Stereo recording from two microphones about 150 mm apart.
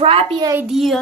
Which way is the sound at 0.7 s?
Centre (ahead or behind).